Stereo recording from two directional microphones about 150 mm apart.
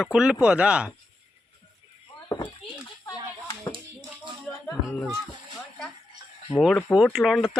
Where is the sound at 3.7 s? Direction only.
35° right (ahead or behind).